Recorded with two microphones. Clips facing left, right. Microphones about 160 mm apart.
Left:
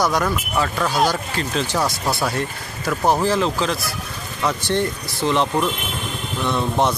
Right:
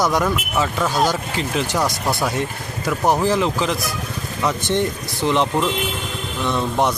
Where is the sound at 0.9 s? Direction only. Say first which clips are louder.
Even; 5° left (ahead or behind).